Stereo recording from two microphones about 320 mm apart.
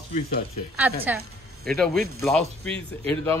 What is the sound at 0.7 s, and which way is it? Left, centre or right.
A woman's voice, centre.